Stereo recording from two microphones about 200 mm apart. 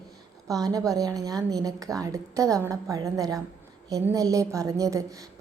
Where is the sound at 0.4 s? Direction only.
15° right (ahead or behind).